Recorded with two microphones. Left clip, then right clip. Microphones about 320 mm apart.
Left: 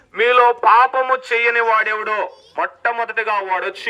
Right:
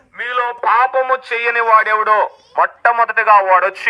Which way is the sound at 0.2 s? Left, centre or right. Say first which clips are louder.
Left 6 dB; left.